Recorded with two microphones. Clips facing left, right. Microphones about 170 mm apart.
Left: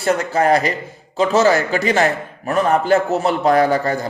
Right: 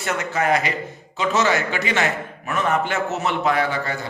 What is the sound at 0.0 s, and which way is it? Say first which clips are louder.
A man's voice: left 6 dB; 35° left (ahead or behind).